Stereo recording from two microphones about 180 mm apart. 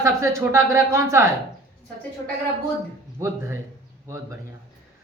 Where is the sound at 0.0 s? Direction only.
15° right (ahead or behind).